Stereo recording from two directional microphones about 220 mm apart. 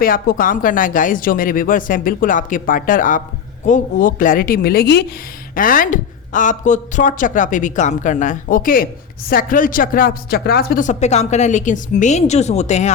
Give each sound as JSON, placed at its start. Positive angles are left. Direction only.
{"t": 0.0, "sound": "speech", "side_deg": 40}